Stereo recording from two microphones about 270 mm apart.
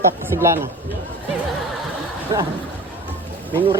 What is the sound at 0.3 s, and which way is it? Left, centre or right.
Speech, centre.